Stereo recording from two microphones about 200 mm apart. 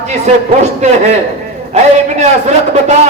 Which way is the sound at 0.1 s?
35° right (ahead or behind).